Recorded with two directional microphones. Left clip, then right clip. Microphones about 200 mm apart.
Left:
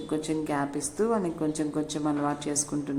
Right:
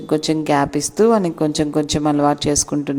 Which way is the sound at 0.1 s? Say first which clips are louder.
Right 13 dB; 50° right (ahead or behind).